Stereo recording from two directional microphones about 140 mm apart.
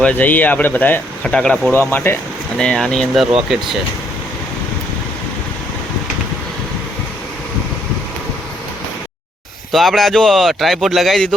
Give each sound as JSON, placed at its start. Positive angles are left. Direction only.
{"t": 0.0, "sound": "speech", "side_deg": 10}
{"t": 2.6, "sound": "speech", "side_deg": 5}
{"t": 9.7, "sound": "speech", "side_deg": 0}